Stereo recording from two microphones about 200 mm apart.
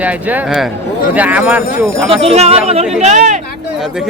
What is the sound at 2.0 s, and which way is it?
Speech, 30° right (ahead or behind).